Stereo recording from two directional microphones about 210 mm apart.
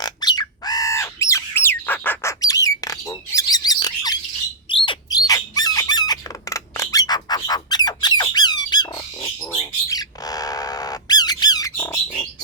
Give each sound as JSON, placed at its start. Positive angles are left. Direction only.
{"t": 0.0, "sound": "squawk", "side_deg": 20}
{"t": 4.7, "sound": "bird", "side_deg": 20}